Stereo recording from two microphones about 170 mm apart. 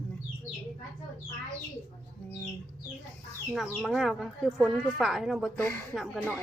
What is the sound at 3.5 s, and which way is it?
Speech, centre (ahead or behind).